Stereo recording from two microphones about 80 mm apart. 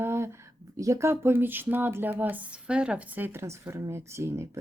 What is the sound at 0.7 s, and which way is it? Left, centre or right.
Speech, right.